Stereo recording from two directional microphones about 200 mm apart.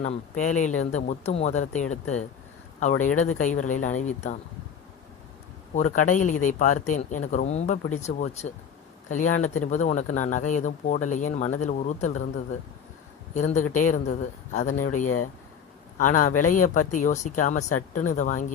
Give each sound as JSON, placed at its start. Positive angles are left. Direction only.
{"t": 0.0, "sound": "speech", "side_deg": 35}
{"t": 5.7, "sound": "speech", "side_deg": 40}
{"t": 13.3, "sound": "speech", "side_deg": 35}